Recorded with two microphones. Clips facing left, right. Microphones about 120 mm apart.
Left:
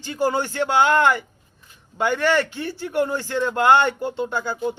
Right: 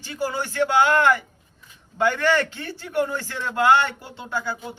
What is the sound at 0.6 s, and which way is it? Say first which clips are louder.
A man's voice: even; 20° left (ahead or behind).